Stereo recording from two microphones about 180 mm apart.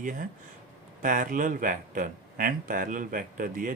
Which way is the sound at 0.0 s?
50° right (ahead or behind).